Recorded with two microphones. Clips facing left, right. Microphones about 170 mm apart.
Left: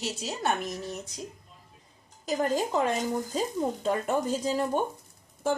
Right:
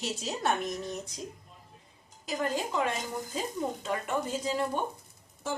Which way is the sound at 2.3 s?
40° left (ahead or behind).